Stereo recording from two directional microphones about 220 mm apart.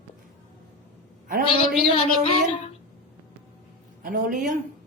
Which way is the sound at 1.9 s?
25° left (ahead or behind).